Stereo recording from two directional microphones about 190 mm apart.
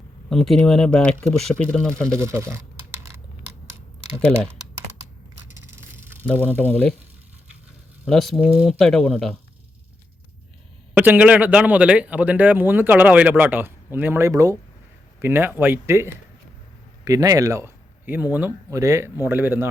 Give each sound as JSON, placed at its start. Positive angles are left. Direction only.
{"t": 0.3, "sound": "speech", "side_deg": 0}
{"t": 2.0, "sound": "computer keyboard", "side_deg": -15}
{"t": 6.4, "sound": "speech", "side_deg": 10}
{"t": 8.0, "sound": "speech", "side_deg": 0}
{"t": 10.9, "sound": "a man's voice", "side_deg": -10}